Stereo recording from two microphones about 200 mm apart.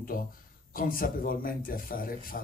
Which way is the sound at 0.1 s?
45° left (ahead or behind).